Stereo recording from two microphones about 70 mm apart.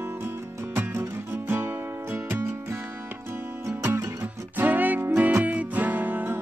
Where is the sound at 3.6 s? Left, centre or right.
Right.